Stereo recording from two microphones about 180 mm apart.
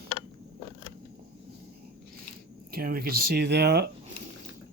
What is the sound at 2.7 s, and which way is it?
Speech, 55° right (ahead or behind).